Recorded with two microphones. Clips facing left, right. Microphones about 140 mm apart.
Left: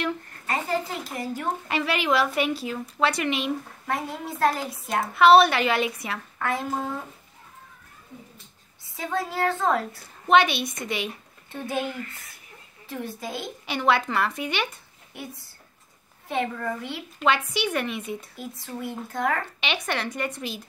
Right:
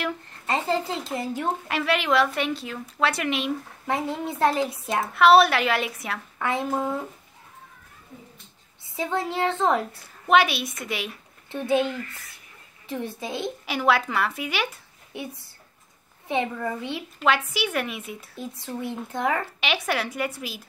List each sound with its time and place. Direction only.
0.5 s speech: 25° right (ahead or behind)
1.7 s a woman's voice: centre (ahead or behind)
3.8 s speech: 20° right (ahead or behind)
5.1 s a woman's voice: centre (ahead or behind)
6.3 s a woman's voice: 20° right (ahead or behind)
9.0 s speech: 20° right (ahead or behind)
10.2 s a woman's voice: 5° right (ahead or behind)
12.0 s speech: 25° left (ahead or behind)
12.8 s speech: 20° right (ahead or behind)
13.7 s a woman's voice: 5° right (ahead or behind)
16.3 s speech: 20° right (ahead or behind)
17.2 s a woman's voice: centre (ahead or behind)
18.3 s speech: 25° right (ahead or behind)
19.6 s a woman's voice: 5° right (ahead or behind)